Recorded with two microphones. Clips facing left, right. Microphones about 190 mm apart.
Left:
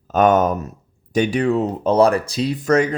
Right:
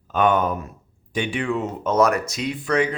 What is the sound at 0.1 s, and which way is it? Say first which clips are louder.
Speech: left 5 dB; 40° left (ahead or behind).